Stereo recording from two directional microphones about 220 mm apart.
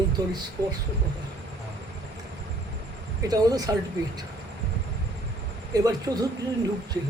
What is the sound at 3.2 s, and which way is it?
Speech, 15° right (ahead or behind).